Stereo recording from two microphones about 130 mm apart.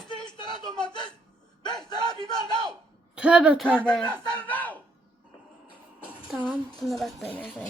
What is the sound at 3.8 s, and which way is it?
A man's voice, 10° left (ahead or behind).